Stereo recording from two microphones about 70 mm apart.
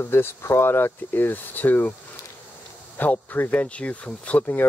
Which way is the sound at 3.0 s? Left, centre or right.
Left.